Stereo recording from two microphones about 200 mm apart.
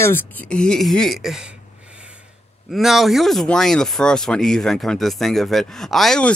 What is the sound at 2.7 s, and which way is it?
Speech, centre (ahead or behind).